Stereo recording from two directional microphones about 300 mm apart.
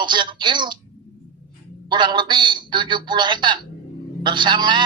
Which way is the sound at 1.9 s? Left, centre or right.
Centre.